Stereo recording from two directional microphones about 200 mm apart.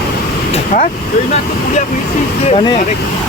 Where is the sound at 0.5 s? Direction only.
40° left (ahead or behind).